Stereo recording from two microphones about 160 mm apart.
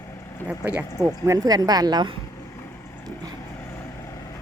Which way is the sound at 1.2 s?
25° right (ahead or behind).